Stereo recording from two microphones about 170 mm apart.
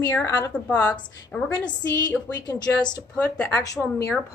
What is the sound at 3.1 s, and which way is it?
Speech, 10° left (ahead or behind).